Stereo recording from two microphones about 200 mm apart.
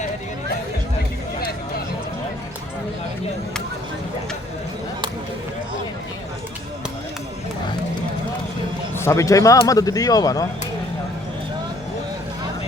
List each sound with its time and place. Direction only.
9.0 s a man's voice: 15° left (ahead or behind)